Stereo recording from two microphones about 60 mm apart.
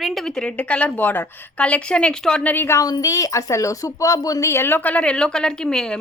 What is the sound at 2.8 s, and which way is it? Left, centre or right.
Speech, left.